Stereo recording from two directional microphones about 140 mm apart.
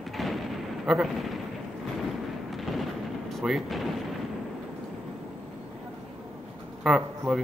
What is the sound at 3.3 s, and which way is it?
Speech, centre (ahead or behind).